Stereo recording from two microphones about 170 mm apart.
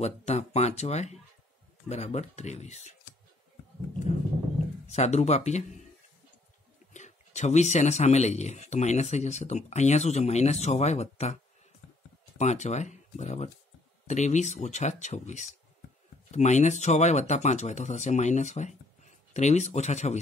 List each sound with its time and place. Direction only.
0.0 s speech: 40° left (ahead or behind)
4.8 s speech: 40° left (ahead or behind)
6.9 s speech: 45° left (ahead or behind)
12.4 s speech: 45° left (ahead or behind)